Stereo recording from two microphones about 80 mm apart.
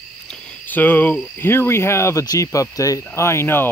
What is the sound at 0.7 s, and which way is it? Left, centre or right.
Cricket, left.